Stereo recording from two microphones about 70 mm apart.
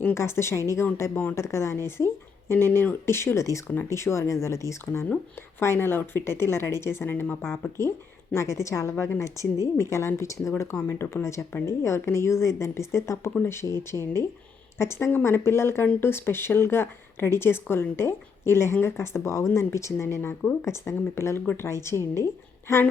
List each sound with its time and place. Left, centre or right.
0.1 s speech: left
1.1 s speech: left
1.4 s a woman's voice: left